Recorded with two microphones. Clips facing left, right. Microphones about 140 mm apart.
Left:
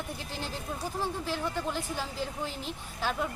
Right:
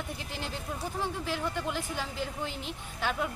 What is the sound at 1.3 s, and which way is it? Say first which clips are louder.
Speech: even; 5° left (ahead or behind).